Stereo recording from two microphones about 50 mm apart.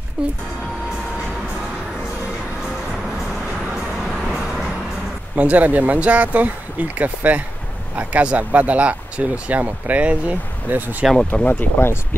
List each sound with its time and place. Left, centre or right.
0.2 s speech: right
5.3 s speech: right
11.3 s speech: left
11.8 s speech: left